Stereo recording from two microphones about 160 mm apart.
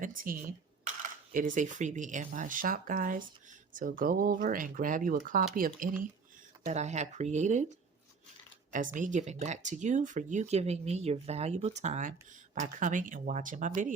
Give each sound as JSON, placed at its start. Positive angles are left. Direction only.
{"t": 0.0, "sound": "speech", "side_deg": -60}
{"t": 6.7, "sound": "speech", "side_deg": -45}
{"t": 8.7, "sound": "speech", "side_deg": -55}